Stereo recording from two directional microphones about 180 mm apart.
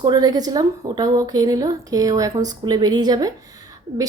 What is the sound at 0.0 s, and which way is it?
Speech, 20° right (ahead or behind).